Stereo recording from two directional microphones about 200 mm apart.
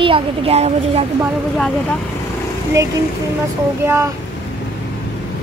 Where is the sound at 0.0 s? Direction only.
25° right (ahead or behind).